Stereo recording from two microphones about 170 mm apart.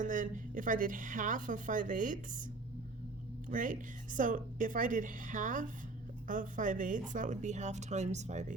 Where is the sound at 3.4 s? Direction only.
50° right (ahead or behind).